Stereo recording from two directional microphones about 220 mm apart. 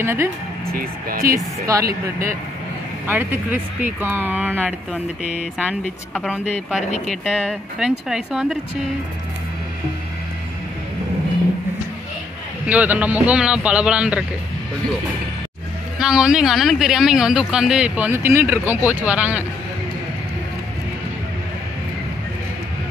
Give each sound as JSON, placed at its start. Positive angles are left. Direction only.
{"t": 0.0, "sound": "speech", "side_deg": -10}
{"t": 0.7, "sound": "speech", "side_deg": -40}
{"t": 1.2, "sound": "speech", "side_deg": -15}
{"t": 3.1, "sound": "speech", "side_deg": -10}
{"t": 12.6, "sound": "speech", "side_deg": -5}
{"t": 16.0, "sound": "speech", "side_deg": -5}